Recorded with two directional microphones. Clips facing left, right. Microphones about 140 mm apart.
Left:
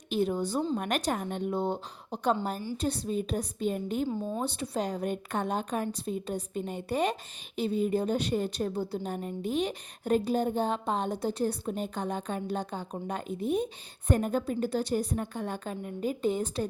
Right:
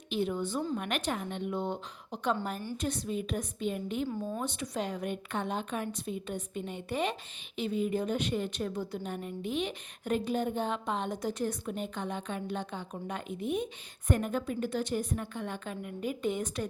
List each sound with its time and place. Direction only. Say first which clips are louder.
0.1 s a woman's voice: left 3 dB; 40° left (ahead or behind)